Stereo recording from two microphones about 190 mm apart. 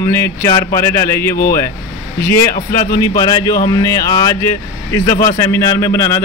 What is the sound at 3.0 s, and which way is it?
Speech, 20° left (ahead or behind).